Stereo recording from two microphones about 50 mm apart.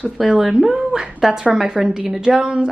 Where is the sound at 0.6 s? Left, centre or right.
Centre.